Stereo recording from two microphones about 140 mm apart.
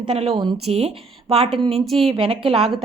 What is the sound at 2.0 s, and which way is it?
Speech, 40° right (ahead or behind).